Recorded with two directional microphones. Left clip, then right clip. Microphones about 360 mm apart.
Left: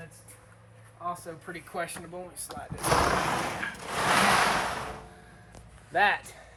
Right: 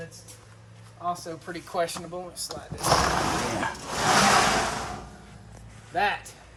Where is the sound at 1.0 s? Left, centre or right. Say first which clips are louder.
Right 4 dB; centre.